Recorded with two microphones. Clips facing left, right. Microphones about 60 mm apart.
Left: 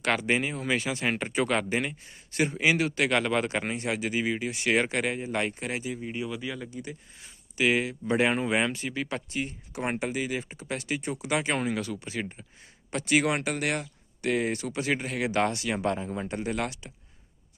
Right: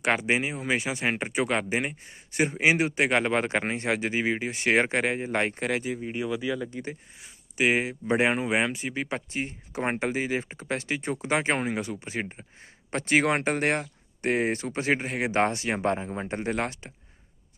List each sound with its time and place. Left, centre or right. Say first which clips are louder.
0.0 s speech: right 1 dB; centre
1.9 s speech: right 1 dB; right
6.0 s speech: right 3 dB; right
7.5 s speech: right 1 dB; right
8.4 s speech: right 1 dB; centre; by 16.9 s right